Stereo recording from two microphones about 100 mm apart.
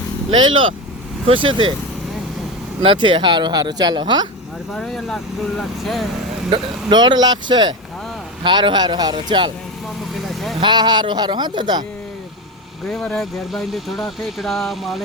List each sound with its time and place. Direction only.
0.3 s speech: 55° right (ahead or behind)
2.8 s speech: 60° right (ahead or behind)
4.7 s speech: centre (ahead or behind)
6.9 s speech: 45° right (ahead or behind)
10.2 s vehicle: centre (ahead or behind)
10.6 s speech: 50° right (ahead or behind)
12.9 s speech: 5° left (ahead or behind)